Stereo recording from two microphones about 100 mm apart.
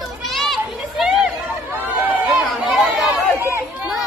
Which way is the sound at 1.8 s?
15° right (ahead or behind).